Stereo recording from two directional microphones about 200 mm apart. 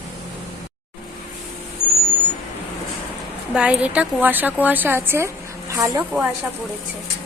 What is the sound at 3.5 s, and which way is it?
A woman's voice, 5° right (ahead or behind).